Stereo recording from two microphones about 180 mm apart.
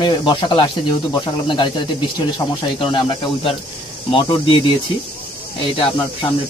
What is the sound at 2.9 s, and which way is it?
Speech, 30° left (ahead or behind).